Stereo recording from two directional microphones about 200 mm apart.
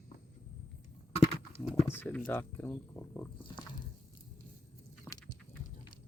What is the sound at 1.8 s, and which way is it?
Speech, 10° left (ahead or behind).